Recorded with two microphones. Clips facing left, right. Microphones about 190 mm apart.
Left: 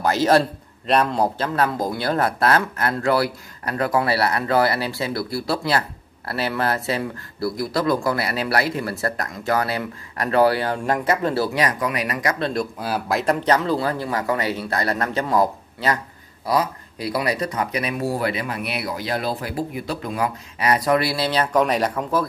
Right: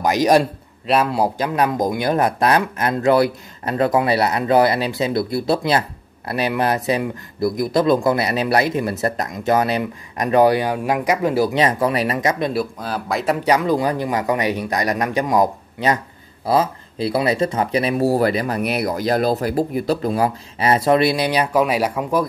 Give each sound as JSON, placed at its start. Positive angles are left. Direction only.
{"t": 0.0, "sound": "speech", "side_deg": -15}
{"t": 11.5, "sound": "speech", "side_deg": -30}
{"t": 12.7, "sound": "speech", "side_deg": 5}
{"t": 13.2, "sound": "speech", "side_deg": -5}